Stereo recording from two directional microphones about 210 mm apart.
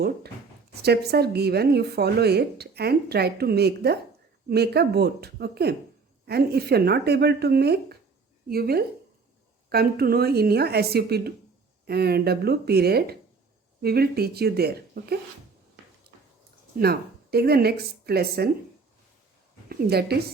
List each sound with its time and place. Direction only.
0.8 s a woman's voice: 50° right (ahead or behind)
16.1 s dog: 50° right (ahead or behind)
16.7 s a woman's voice: 50° right (ahead or behind)
19.6 s speech: 50° right (ahead or behind)